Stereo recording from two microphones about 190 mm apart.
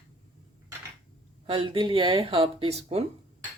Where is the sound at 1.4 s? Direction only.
30° right (ahead or behind).